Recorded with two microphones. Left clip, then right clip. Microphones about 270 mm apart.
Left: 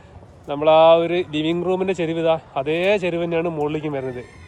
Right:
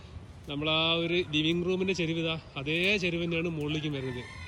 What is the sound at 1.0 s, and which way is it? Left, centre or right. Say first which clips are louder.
Speech: left 8 dB; centre.